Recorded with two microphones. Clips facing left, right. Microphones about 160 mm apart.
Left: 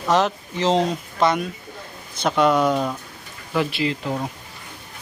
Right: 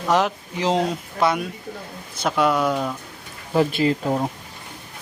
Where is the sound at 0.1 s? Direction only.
10° right (ahead or behind).